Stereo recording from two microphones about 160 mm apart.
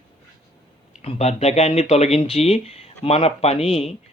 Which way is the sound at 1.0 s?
40° left (ahead or behind).